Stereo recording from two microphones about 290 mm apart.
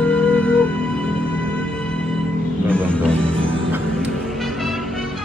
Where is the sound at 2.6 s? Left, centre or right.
Centre.